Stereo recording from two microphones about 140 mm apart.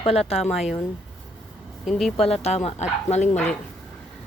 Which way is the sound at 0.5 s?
Centre (ahead or behind).